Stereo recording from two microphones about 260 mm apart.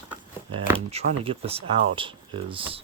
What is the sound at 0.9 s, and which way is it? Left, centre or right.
Speech, right.